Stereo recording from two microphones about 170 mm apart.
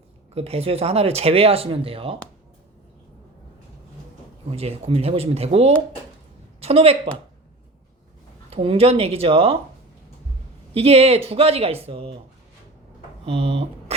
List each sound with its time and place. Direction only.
0.3 s speech: 35° right (ahead or behind)
4.5 s speech: 40° right (ahead or behind)
8.4 s speech: 35° right (ahead or behind)
10.8 s speech: 35° right (ahead or behind)
13.2 s speech: 35° right (ahead or behind)